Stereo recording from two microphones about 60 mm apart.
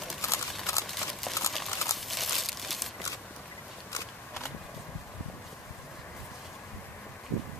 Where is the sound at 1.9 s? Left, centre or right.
Centre.